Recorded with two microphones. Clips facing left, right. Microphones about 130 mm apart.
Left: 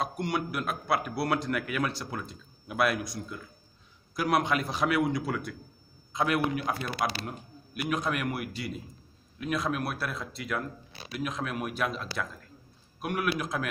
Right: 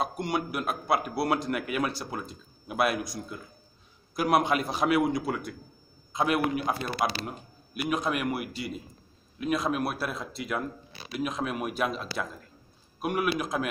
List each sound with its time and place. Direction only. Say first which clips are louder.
0.0 s a man's voice: right 1 dB; 10° right (ahead or behind)
6.8 s a man's voice: right 2 dB; 35° right (ahead or behind)
7.2 s a man's voice: even; 10° right (ahead or behind)
13.0 s a man's voice: right 2 dB; 15° right (ahead or behind)